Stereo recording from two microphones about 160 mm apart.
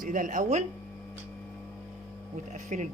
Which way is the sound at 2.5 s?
50° right (ahead or behind).